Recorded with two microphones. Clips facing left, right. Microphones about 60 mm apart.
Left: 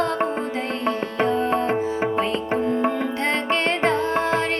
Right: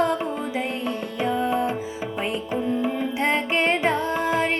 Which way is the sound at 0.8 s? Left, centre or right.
Left.